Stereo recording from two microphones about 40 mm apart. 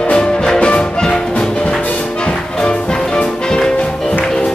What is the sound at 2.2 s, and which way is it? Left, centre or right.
Music, left.